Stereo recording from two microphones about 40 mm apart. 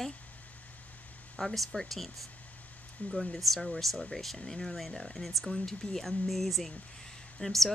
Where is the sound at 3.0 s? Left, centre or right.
Left.